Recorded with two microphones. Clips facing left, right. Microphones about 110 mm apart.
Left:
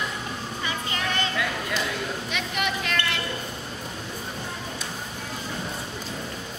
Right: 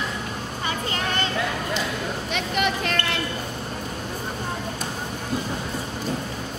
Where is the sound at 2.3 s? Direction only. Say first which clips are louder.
Right 5 dB; 40° right (ahead or behind).